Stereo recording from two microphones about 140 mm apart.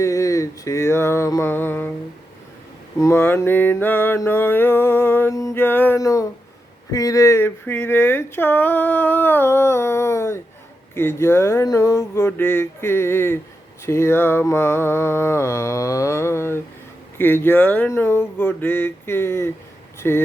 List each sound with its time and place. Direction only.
0.0 s mantra: 25° left (ahead or behind)
3.0 s speech: 15° left (ahead or behind)
13.8 s mantra: 20° left (ahead or behind)
17.2 s speech: 15° left (ahead or behind)